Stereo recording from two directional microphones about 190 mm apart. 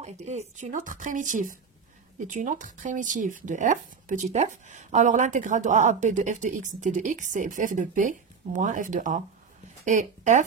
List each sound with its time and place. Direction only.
0.0 s speech: 35° right (ahead or behind)